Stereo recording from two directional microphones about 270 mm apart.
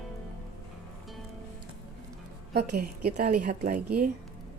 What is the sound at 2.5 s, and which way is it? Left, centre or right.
A woman's voice, right.